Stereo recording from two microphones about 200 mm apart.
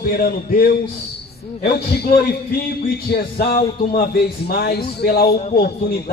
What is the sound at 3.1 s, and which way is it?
A man's voice, 55° left (ahead or behind).